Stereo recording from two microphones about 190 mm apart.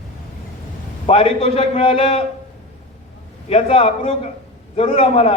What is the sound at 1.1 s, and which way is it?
A man's voice, 30° left (ahead or behind).